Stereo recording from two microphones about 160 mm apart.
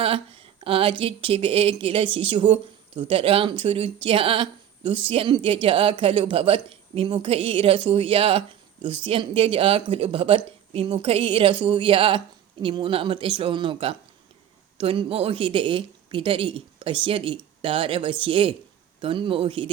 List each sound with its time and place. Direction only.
0.0 s speech: 35° right (ahead or behind)